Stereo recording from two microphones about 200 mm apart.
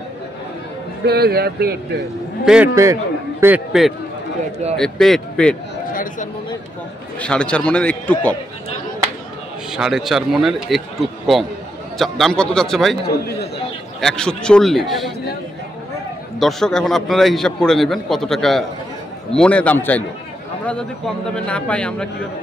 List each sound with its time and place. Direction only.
1.0 s speech: 50° right (ahead or behind)
2.4 s a man's voice: 5° right (ahead or behind)
2.7 s a man's voice: 15° right (ahead or behind); by 5.6 s 5° left (ahead or behind)
7.2 s a man's voice: 5° left (ahead or behind)
9.7 s a man's voice: centre (ahead or behind)
13.0 s a man's voice: 50° left (ahead or behind)
14.0 s a man's voice: 5° left (ahead or behind)
16.3 s a man's voice: centre (ahead or behind)